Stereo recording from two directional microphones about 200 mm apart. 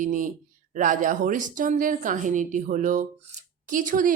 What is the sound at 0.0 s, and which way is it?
Speech, 40° right (ahead or behind).